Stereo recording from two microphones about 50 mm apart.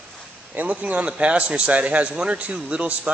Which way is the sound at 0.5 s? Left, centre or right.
Right.